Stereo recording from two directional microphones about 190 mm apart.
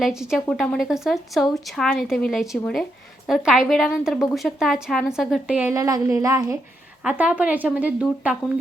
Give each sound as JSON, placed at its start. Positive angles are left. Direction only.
{"t": 0.0, "sound": "a woman's voice", "side_deg": -5}
{"t": 7.0, "sound": "speech", "side_deg": -5}